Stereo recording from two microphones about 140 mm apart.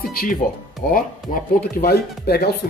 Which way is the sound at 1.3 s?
75° left (ahead or behind).